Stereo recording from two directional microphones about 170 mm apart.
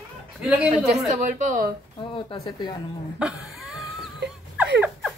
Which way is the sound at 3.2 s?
5° right (ahead or behind).